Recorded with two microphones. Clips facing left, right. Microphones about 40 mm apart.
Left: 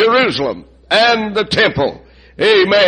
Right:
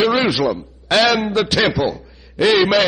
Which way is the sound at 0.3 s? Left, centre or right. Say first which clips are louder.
Even; centre.